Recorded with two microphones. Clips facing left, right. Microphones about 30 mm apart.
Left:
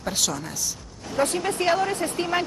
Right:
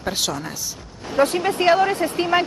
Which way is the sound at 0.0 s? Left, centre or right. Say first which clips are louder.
Right 3 dB; right.